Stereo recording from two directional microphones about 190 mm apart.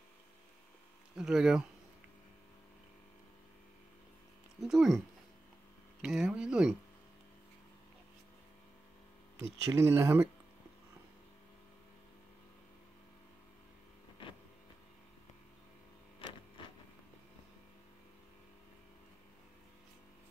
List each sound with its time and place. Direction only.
1.1 s speech: 5° right (ahead or behind)
4.6 s speech: centre (ahead or behind)
6.0 s speech: 5° right (ahead or behind)
9.7 s speech: 15° right (ahead or behind)
16.2 s printer: 25° left (ahead or behind)